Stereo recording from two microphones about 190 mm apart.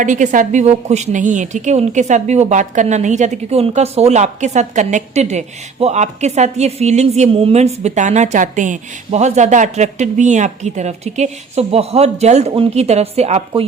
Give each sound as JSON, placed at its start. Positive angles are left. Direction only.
{"t": 0.0, "sound": "a woman's voice", "side_deg": -40}